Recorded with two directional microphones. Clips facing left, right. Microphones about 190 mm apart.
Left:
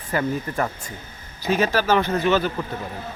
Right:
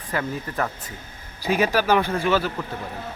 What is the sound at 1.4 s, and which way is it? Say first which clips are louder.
Speech: even; 10° right (ahead or behind).